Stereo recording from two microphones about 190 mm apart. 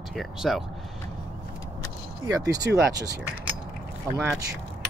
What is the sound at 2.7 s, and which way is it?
Speech, 65° right (ahead or behind).